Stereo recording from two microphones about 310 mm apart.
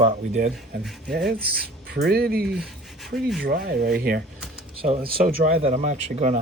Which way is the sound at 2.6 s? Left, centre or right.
Centre.